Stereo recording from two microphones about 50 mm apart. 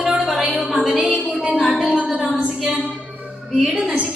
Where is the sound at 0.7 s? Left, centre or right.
Centre.